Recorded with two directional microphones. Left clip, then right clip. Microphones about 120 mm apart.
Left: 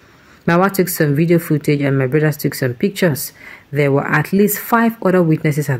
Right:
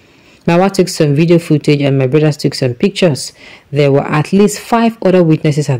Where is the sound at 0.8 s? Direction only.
35° right (ahead or behind).